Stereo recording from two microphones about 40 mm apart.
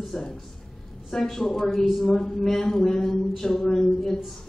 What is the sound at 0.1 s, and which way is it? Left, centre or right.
Speech, centre.